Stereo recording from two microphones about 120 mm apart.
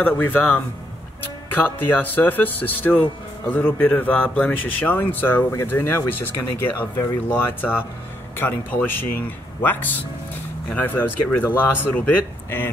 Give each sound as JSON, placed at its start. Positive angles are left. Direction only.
{"t": 0.0, "sound": "a man's voice", "side_deg": 15}